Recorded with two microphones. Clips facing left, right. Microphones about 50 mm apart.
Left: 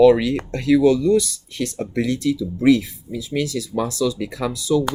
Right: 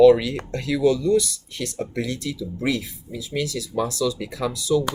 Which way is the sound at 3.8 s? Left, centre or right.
Left.